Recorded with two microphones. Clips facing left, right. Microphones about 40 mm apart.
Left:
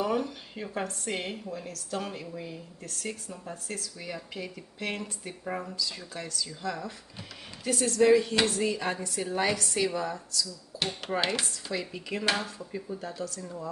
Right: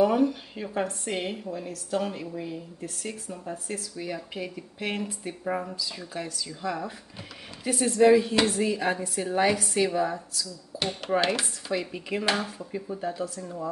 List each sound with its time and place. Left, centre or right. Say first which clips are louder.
0.0 s speech: right 7 dB; centre
11.1 s chopping: right 6 dB; centre
11.7 s speech: right 5 dB; centre